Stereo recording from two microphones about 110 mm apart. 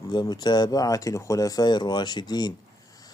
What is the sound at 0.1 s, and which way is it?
Speech, 40° left (ahead or behind).